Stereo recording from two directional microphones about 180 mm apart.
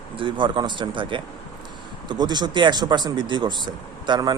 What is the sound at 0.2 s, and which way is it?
Speech, 25° right (ahead or behind).